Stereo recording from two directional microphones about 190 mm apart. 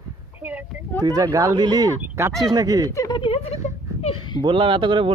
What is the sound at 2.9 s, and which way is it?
Speech, 20° left (ahead or behind).